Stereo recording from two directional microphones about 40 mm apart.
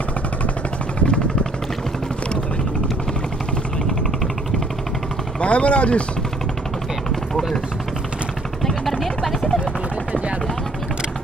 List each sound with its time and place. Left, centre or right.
0.9 s vehicle: left
5.4 s speech: left
9.0 s vehicle: centre